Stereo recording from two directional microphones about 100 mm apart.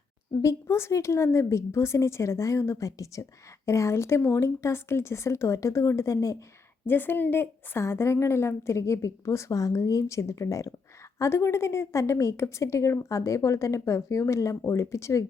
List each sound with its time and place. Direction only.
0.4 s a woman's voice: 30° left (ahead or behind)
6.8 s a woman's voice: 20° left (ahead or behind)